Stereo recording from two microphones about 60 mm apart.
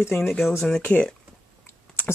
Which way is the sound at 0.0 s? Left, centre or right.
Left.